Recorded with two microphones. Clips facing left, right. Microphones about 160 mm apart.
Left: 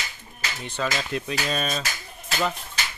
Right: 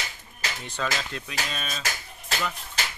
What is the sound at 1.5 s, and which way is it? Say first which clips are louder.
Speech: left 8 dB; 40° left (ahead or behind).